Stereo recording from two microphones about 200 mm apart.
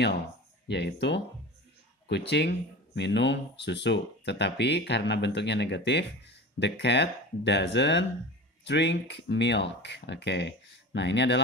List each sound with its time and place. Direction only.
0.7 s speech: 60° left (ahead or behind)